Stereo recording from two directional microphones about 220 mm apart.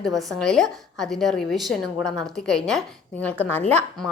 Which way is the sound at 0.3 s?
Centre (ahead or behind).